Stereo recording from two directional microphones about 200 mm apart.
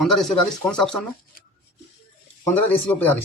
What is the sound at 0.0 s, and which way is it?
Speech, centre (ahead or behind).